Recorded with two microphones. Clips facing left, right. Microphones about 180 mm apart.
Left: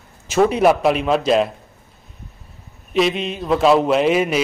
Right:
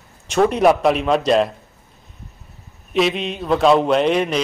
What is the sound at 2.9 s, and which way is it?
A man's voice, centre (ahead or behind).